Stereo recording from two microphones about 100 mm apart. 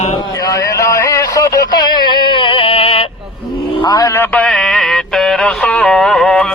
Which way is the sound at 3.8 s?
35° left (ahead or behind).